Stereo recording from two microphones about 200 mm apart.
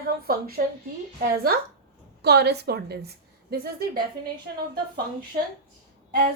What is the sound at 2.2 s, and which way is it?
A woman's voice, 55° right (ahead or behind).